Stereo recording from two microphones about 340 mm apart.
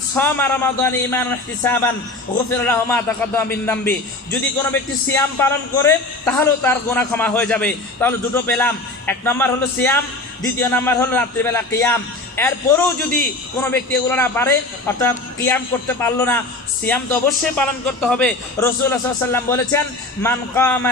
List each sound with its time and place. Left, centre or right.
0.1 s a man's voice: centre